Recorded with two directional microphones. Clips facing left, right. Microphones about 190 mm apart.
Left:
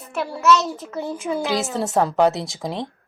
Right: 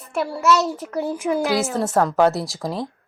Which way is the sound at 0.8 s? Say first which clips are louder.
Right 3 dB; 10° right (ahead or behind).